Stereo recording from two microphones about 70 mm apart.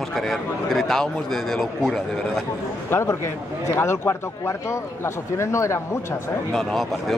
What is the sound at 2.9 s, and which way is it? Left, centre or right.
Speech, left.